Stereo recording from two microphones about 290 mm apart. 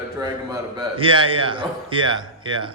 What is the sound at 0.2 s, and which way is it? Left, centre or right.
A man's voice, centre.